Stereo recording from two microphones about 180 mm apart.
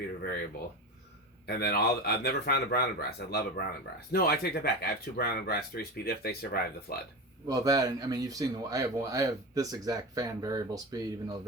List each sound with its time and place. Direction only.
1.5 s speech: 60° left (ahead or behind)
7.4 s speech: 20° right (ahead or behind)